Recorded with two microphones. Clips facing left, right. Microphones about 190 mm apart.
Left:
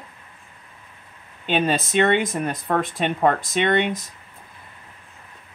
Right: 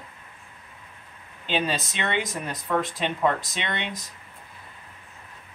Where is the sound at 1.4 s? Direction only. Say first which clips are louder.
Left 5 dB; 55° left (ahead or behind).